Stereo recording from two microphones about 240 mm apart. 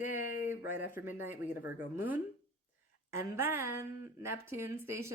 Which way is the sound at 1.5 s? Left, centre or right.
Centre.